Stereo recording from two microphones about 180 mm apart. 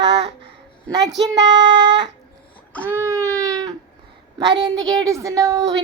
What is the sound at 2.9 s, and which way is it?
Baby cry, 15° right (ahead or behind).